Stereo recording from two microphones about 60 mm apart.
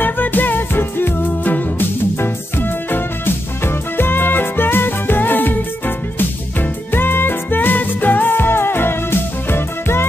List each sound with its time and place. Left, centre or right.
0.0 s music: left